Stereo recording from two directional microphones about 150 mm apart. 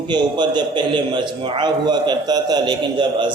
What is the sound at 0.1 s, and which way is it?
A man's voice, 30° right (ahead or behind).